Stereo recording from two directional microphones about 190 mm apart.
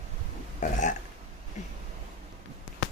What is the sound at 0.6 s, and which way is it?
Burping, 40° left (ahead or behind).